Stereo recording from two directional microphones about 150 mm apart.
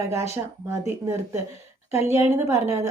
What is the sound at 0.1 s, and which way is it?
A woman's voice, 20° right (ahead or behind).